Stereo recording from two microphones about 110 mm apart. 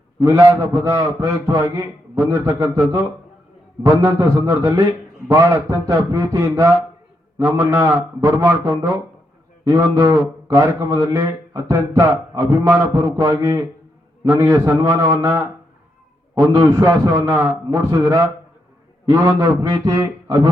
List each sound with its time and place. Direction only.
0.3 s speech: 30° right (ahead or behind)
16.5 s speech: 30° right (ahead or behind)
19.0 s speech: 30° right (ahead or behind)
20.0 s a sound: 45° right (ahead or behind)